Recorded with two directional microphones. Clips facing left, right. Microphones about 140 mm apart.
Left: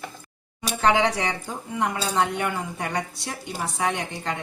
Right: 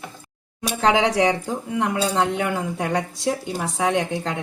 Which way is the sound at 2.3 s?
90° right.